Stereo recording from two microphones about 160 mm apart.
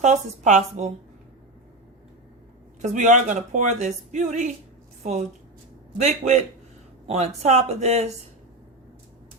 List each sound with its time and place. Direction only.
0.0 s a woman's voice: 45° right (ahead or behind)
2.8 s a woman's voice: 50° right (ahead or behind)
6.0 s a woman's voice: 45° right (ahead or behind)